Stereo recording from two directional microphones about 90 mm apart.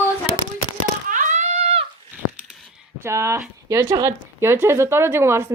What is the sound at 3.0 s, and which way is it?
Speech, 30° right (ahead or behind).